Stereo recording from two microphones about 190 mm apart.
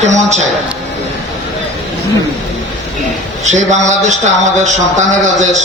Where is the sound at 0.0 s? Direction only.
35° right (ahead or behind).